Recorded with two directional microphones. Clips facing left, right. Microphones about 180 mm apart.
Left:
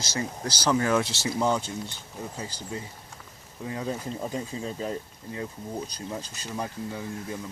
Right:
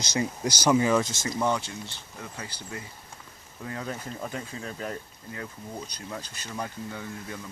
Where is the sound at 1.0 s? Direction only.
65° left (ahead or behind).